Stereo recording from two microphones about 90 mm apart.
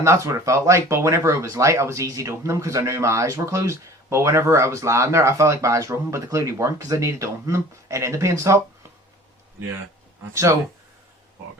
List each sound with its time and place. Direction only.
0.0 s speech: 35° right (ahead or behind)